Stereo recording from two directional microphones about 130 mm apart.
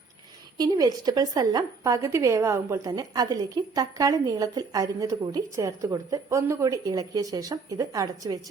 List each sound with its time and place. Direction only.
0.5 s a woman's voice: 30° right (ahead or behind)